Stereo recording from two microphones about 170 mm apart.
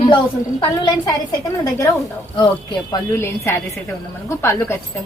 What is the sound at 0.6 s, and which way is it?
Speech, 25° left (ahead or behind).